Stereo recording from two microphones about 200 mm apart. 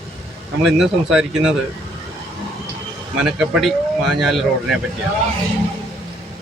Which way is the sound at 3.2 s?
Centre (ahead or behind).